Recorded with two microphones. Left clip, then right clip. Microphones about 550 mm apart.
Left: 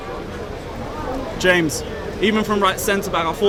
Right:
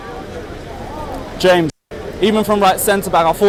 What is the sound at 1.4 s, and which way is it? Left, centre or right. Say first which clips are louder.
Speech: right 4 dB; right.